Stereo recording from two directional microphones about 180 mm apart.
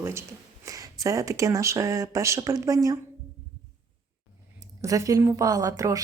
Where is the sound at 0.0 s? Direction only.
15° right (ahead or behind).